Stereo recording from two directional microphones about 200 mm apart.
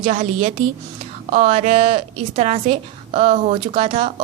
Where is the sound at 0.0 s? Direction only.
35° right (ahead or behind).